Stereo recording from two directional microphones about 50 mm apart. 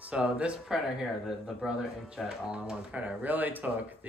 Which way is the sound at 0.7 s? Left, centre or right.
Centre.